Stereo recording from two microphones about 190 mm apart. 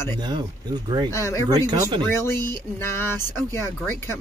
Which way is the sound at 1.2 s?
15° left (ahead or behind).